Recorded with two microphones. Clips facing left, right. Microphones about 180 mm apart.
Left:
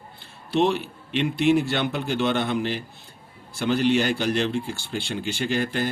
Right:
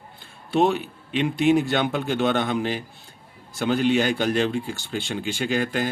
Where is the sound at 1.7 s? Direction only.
45° right (ahead or behind).